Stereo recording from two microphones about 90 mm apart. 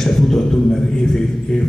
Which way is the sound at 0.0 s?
5° left (ahead or behind).